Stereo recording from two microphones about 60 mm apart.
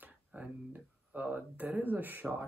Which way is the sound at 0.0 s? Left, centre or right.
Right.